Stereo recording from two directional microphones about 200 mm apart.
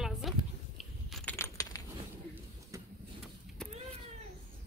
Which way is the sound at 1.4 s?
15° left (ahead or behind).